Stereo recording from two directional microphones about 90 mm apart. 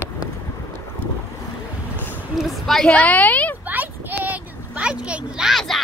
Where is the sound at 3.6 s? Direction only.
20° right (ahead or behind).